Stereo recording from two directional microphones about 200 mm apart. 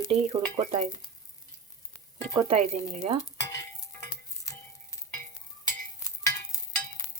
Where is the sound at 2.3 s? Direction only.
35° right (ahead or behind).